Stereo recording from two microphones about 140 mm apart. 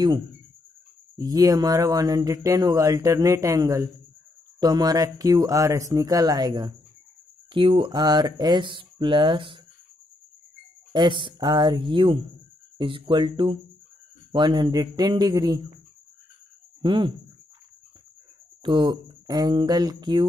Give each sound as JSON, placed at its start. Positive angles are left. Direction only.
{"t": 1.1, "sound": "speech", "side_deg": -25}
{"t": 10.9, "sound": "speech", "side_deg": -35}
{"t": 16.8, "sound": "speech", "side_deg": -35}
{"t": 18.6, "sound": "speech", "side_deg": -35}